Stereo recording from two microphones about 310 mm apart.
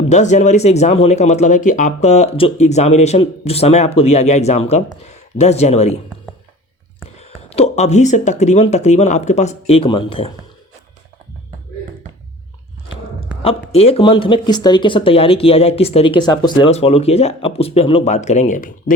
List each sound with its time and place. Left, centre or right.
0.1 s speech: left
7.2 s speech: left
13.7 s speech: centre